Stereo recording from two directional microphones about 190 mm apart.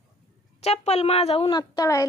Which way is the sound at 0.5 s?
35° left (ahead or behind).